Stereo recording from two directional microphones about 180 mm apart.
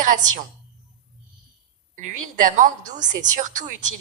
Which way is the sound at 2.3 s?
45° right (ahead or behind).